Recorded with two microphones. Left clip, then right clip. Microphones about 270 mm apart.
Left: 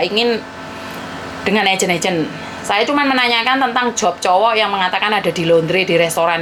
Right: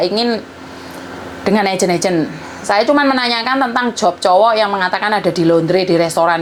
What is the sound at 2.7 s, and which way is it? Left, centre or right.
Speech, right.